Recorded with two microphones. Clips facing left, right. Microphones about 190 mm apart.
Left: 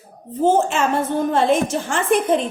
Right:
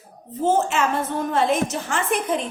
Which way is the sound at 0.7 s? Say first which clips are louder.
Left 3 dB; 30° left (ahead or behind).